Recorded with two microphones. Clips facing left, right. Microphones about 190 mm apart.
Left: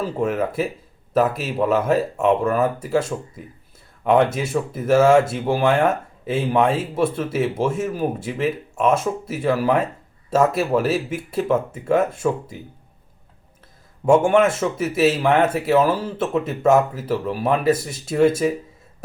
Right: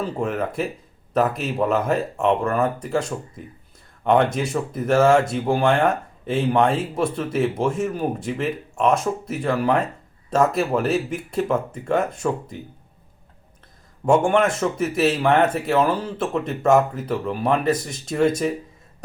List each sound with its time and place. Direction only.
0.0 s speech: 5° left (ahead or behind)
14.0 s speech: 5° left (ahead or behind)